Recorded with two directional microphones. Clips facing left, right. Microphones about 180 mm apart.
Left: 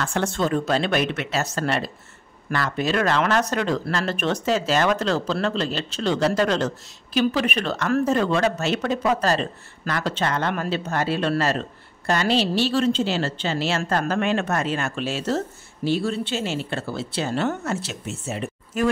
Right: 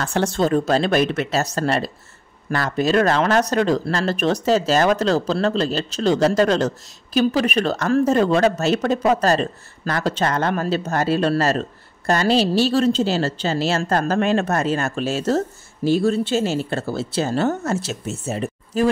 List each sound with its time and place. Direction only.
0.0 s a woman's voice: 35° right (ahead or behind)